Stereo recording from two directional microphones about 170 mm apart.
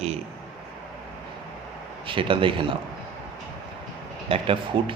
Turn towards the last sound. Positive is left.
turn(degrees=-30)  # may be behind; listen again after turning